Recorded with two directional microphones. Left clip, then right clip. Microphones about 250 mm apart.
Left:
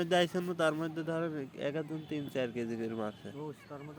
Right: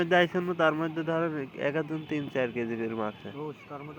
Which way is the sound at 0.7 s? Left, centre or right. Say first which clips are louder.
Right 6 dB; centre.